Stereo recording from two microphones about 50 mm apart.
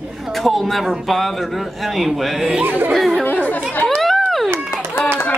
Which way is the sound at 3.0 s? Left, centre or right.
Centre.